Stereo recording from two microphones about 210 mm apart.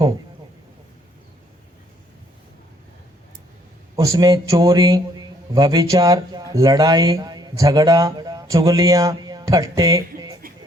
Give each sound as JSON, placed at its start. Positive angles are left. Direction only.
{"t": 3.9, "sound": "a man's voice", "side_deg": -15}